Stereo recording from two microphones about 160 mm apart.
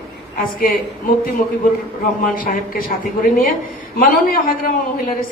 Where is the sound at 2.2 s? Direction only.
60° left (ahead or behind).